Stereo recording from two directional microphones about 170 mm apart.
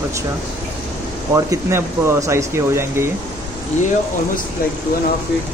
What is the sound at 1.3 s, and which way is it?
Speech, 15° right (ahead or behind).